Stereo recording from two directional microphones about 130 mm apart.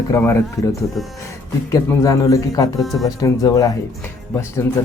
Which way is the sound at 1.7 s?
25° left (ahead or behind).